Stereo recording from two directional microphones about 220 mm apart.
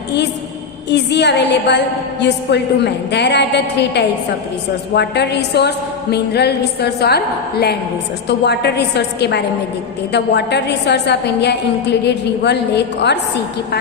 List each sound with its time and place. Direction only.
0.9 s a woman's voice: 50° left (ahead or behind)